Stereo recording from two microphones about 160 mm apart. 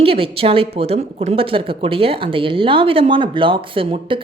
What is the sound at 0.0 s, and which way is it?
Speech, 35° right (ahead or behind).